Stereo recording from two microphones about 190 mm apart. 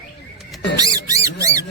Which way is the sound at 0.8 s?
20° right (ahead or behind).